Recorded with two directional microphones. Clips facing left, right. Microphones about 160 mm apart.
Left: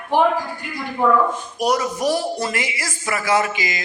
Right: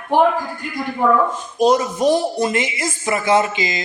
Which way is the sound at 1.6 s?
25° right (ahead or behind).